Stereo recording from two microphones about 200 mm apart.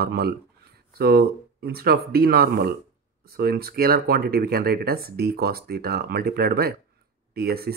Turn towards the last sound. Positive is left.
turn(degrees=-50)  # may be behind; listen again after turning